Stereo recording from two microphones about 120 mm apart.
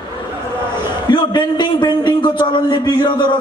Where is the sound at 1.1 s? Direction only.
40° left (ahead or behind).